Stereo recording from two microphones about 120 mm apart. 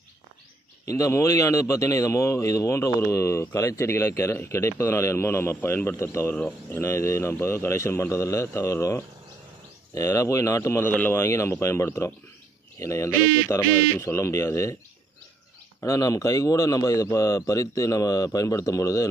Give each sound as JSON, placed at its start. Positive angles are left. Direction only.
{"t": 0.9, "sound": "a man's voice", "side_deg": 25}
{"t": 15.8, "sound": "a man's voice", "side_deg": 30}